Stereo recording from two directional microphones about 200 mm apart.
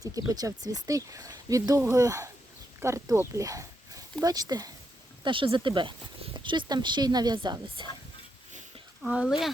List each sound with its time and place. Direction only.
0.0 s speech: 15° right (ahead or behind)
9.0 s speech: 5° right (ahead or behind)